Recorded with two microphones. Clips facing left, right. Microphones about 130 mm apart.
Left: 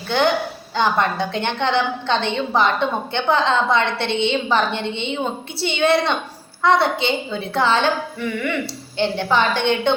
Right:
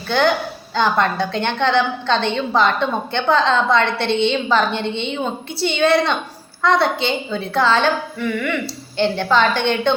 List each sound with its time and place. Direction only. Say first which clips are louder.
0.8 s a woman's voice: right 1 dB; 20° left (ahead or behind)
9.0 s a woman's voice: right 2 dB; 15° left (ahead or behind)